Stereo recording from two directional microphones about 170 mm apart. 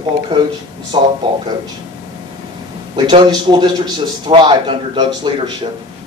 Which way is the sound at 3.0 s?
25° right (ahead or behind).